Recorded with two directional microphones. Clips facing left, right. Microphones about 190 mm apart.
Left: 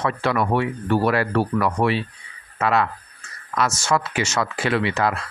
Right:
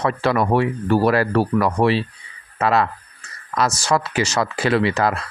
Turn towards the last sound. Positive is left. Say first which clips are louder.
# right 3 dB
turn(degrees=-40)  # may be behind; listen again after turning